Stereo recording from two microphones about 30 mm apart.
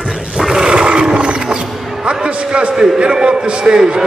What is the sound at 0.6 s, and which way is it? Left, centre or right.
Roar, right.